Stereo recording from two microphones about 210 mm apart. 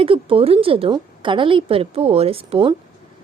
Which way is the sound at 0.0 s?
25° right (ahead or behind).